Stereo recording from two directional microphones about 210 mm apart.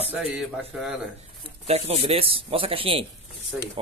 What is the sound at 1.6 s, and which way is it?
Speech, 30° right (ahead or behind).